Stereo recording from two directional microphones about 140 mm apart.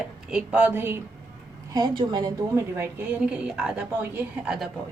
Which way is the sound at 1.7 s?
30° right (ahead or behind).